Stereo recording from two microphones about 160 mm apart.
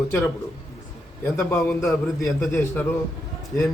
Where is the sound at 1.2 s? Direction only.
15° left (ahead or behind).